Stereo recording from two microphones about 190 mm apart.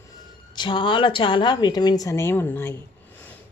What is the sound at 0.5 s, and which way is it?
A woman's voice, 25° left (ahead or behind).